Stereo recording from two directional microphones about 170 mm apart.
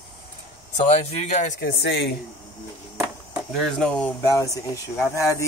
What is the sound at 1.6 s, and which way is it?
Speech, 75° left (ahead or behind).